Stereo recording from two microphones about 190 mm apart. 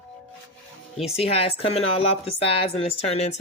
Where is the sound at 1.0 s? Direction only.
30° left (ahead or behind).